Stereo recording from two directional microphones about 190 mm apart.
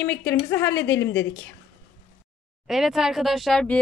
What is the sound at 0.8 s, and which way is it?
Speech, 65° left (ahead or behind).